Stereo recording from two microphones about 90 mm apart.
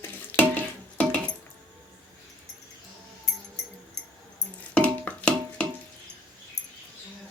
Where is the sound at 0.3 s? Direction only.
20° left (ahead or behind).